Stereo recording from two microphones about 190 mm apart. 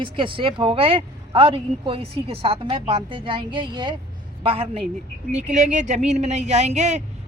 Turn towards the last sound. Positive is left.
turn(degrees=-35)  # may be behind; listen again after turning